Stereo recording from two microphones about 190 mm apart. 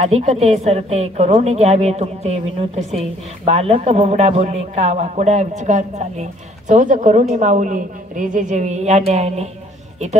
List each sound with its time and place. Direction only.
0.0 s a woman's voice: 35° right (ahead or behind)